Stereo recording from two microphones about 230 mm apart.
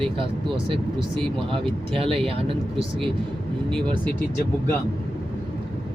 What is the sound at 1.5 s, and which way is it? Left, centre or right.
Speech, right.